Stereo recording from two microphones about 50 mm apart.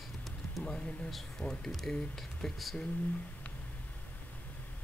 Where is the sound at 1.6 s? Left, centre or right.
Centre.